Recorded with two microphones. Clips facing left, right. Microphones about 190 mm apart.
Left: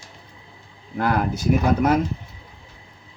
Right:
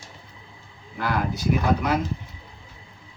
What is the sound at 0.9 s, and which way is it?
Speech, 45° left (ahead or behind).